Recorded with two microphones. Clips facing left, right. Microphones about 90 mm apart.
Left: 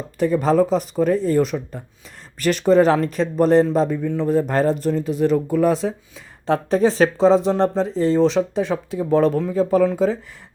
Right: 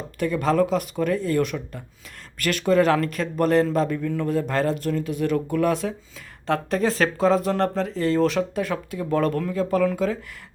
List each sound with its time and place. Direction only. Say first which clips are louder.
0.2 s speech: left 4 dB; 35° left (ahead or behind)
4.3 s speech: left 6 dB; 35° left (ahead or behind)